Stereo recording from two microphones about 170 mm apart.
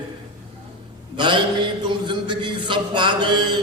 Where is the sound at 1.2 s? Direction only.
30° right (ahead or behind).